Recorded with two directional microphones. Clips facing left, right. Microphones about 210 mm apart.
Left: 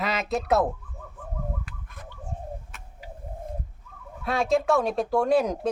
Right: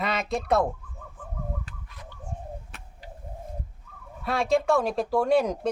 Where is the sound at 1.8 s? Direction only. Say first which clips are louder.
Left 2 dB; 50° left (ahead or behind).